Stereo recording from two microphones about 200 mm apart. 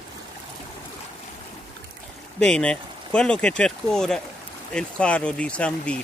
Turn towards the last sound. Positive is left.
turn(degrees=5)  # may be behind; listen again after turning